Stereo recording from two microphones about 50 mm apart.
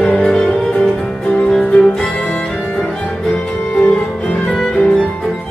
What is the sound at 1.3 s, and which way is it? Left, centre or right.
Music, centre.